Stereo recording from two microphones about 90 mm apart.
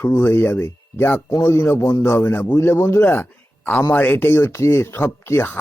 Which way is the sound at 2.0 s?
25° left (ahead or behind).